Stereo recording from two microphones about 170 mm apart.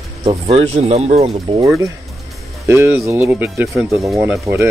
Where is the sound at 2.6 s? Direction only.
15° right (ahead or behind).